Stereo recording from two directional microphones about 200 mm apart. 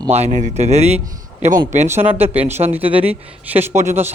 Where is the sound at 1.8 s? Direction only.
10° right (ahead or behind).